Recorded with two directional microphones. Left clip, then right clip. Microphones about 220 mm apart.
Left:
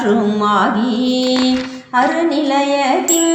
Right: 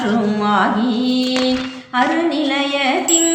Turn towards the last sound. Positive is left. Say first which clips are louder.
# left 2 dB
turn(degrees=15)  # may be behind; listen again after turning